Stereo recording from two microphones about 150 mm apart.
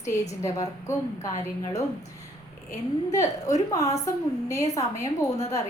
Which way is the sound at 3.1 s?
20° left (ahead or behind).